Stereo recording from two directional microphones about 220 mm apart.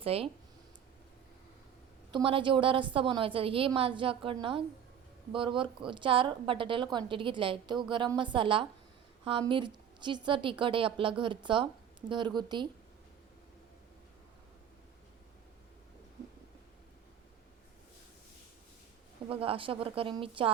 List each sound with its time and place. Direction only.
0.0 s speech: 25° right (ahead or behind)
2.1 s a woman's voice: 25° right (ahead or behind)
19.3 s a woman's voice: 25° right (ahead or behind)